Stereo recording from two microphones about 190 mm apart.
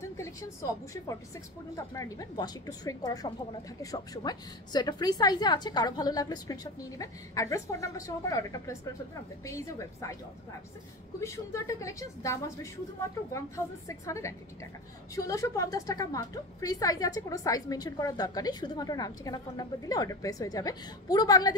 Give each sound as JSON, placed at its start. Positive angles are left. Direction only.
{"t": 0.2, "sound": "a woman's voice", "side_deg": 15}
{"t": 11.1, "sound": "a woman's voice", "side_deg": 15}
{"t": 13.8, "sound": "a woman's voice", "side_deg": 15}